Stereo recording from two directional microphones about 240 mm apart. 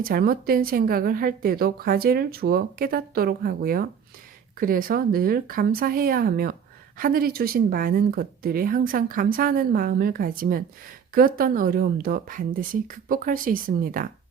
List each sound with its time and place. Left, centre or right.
0.0 s a woman's voice: right